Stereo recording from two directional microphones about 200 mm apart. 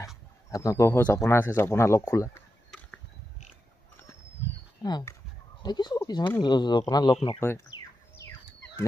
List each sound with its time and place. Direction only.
0.5 s speech: 15° left (ahead or behind)
4.8 s speech: 20° left (ahead or behind)
7.3 s a sound: 15° left (ahead or behind)